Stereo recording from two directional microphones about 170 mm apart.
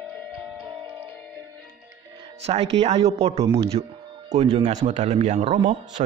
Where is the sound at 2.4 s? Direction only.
35° right (ahead or behind).